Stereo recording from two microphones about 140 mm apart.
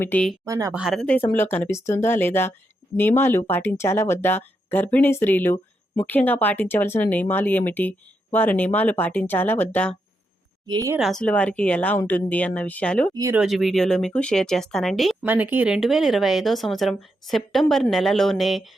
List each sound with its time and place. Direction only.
0.0 s speech: 15° left (ahead or behind)
0.4 s speech: 25° right (ahead or behind)
0.7 s speech: 5° right (ahead or behind)
0.9 s speech: 10° left (ahead or behind)
10.7 s speech: 25° right (ahead or behind)
11.1 s speech: 10° left (ahead or behind)
13.3 s speech: 5° right (ahead or behind)
15.2 s speech: 15° right (ahead or behind)